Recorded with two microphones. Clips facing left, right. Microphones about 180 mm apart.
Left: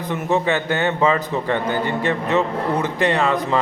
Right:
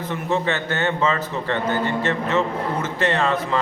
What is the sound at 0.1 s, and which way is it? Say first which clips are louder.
A man's voice: left 4 dB; 15° left (ahead or behind).